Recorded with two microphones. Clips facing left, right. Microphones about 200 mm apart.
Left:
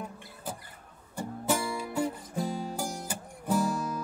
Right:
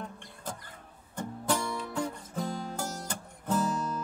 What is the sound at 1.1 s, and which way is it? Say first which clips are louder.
Music: left 1 dB; 10° left (ahead or behind).